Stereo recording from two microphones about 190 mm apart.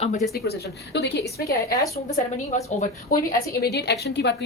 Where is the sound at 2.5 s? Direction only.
35° left (ahead or behind).